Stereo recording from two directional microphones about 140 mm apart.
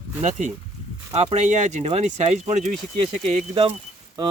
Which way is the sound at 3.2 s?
45° right (ahead or behind).